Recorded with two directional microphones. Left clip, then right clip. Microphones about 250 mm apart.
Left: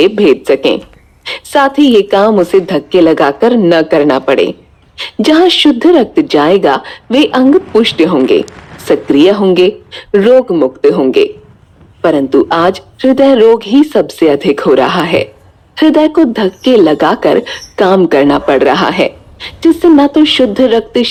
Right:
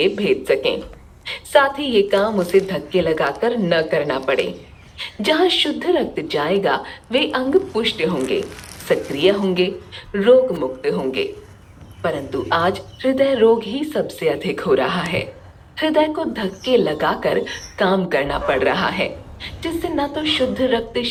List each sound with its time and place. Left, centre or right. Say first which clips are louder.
0.0 s a woman's voice: left 11 dB; centre